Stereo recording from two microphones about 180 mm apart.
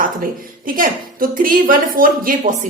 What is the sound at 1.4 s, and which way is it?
A woman's voice, 50° right (ahead or behind).